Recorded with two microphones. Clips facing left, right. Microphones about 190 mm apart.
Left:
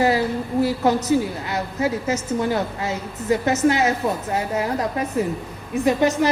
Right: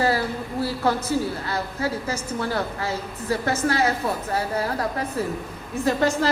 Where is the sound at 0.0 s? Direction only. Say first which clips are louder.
Left 4 dB; 15° left (ahead or behind).